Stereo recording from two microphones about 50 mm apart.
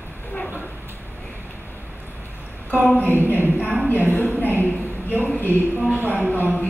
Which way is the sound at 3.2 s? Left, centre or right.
Right.